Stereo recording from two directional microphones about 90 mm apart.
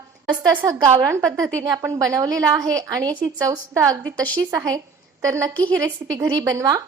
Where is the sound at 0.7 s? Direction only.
40° right (ahead or behind).